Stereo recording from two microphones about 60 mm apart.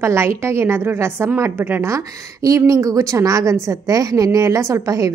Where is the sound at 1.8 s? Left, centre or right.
Right.